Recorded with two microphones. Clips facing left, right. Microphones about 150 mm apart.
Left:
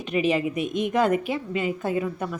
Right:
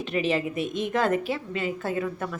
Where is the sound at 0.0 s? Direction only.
15° left (ahead or behind).